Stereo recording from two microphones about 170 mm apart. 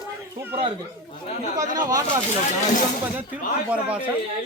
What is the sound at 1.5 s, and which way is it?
Speech, 20° right (ahead or behind).